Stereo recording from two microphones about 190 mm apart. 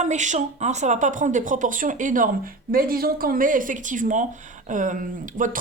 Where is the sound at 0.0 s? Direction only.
40° right (ahead or behind).